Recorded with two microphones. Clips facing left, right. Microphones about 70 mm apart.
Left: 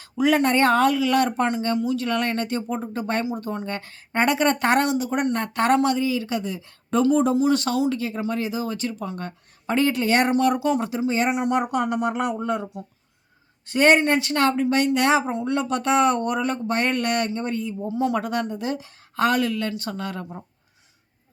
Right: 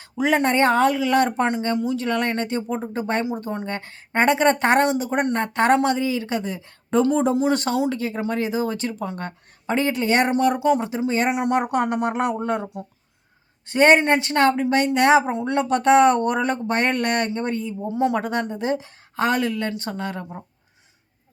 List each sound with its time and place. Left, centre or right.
0.0 s a woman's voice: right
9.0 s a woman's voice: right
9.6 s a woman's voice: right
11.0 s speech: right
11.5 s a woman's voice: right
17.8 s a woman's voice: right